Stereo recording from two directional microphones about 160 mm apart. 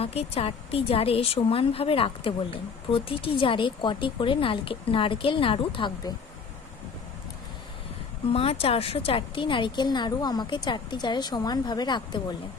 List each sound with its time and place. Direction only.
0.0 s speech: 40° left (ahead or behind)
8.3 s a woman's voice: 40° left (ahead or behind)